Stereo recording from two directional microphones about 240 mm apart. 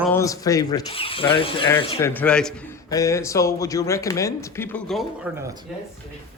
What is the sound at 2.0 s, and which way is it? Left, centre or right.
A man's voice, centre.